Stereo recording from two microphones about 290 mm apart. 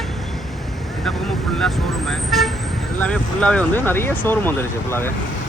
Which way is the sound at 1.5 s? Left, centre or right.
Centre.